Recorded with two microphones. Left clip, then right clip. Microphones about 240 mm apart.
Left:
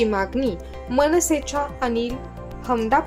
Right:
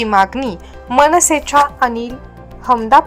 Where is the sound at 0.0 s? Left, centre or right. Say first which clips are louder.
Right 8 dB; centre.